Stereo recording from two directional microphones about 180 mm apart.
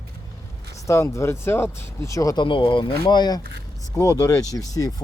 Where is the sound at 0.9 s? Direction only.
15° left (ahead or behind).